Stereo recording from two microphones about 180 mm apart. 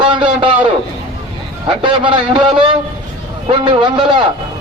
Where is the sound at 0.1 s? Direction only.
30° right (ahead or behind).